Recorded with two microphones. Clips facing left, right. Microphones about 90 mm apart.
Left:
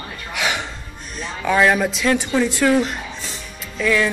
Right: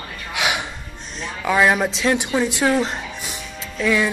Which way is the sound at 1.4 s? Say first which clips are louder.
Left 1 dB; 5° right (ahead or behind).